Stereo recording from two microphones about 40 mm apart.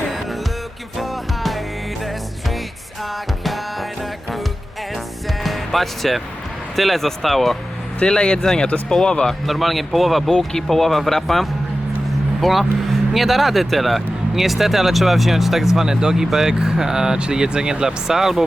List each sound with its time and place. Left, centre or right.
0.9 s music: centre
5.4 s music: centre
6.7 s speech: centre
8.0 s speech: left
9.5 s speech: centre